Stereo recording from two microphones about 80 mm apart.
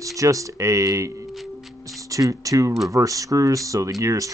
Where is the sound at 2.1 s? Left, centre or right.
Right.